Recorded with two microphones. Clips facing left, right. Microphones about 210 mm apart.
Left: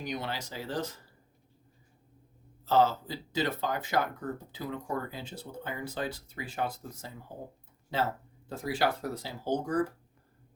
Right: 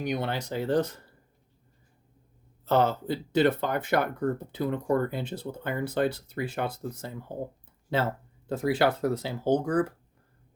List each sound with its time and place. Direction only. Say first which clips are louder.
0.0 s speech: right 6 dB; 60° right (ahead or behind)
2.6 s speech: right 2 dB; 60° right (ahead or behind)
8.4 s speech: right 6 dB; 60° right (ahead or behind)